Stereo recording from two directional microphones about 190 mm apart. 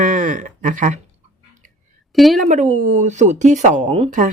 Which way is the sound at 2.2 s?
Centre (ahead or behind).